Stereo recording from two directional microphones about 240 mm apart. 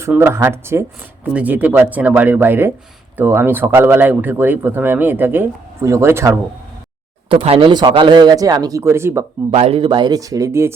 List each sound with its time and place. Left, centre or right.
0.0 s speech: centre
7.3 s speech: right
9.5 s speech: right; by 10.8 s centre